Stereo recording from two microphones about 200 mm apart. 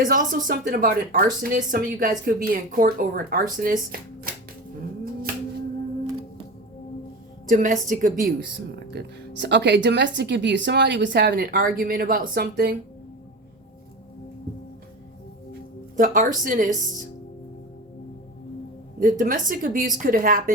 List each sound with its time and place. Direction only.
0.0 s speech: 40° right (ahead or behind)
7.4 s a woman's voice: 40° right (ahead or behind)
8.9 s speech: 60° right (ahead or behind)
16.0 s a woman's voice: 40° right (ahead or behind)
18.9 s speech: 45° right (ahead or behind)